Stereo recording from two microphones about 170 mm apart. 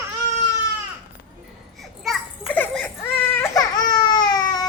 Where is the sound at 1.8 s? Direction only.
5° left (ahead or behind).